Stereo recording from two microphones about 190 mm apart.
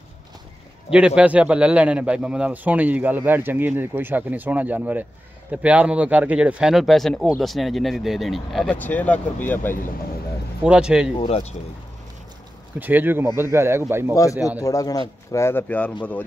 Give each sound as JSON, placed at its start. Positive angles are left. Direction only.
{"t": 0.8, "sound": "a man's voice", "side_deg": -5}
{"t": 10.6, "sound": "speech", "side_deg": -5}
{"t": 11.1, "sound": "speech", "side_deg": 30}
{"t": 12.7, "sound": "a man's voice", "side_deg": -10}
{"t": 14.1, "sound": "speech", "side_deg": 15}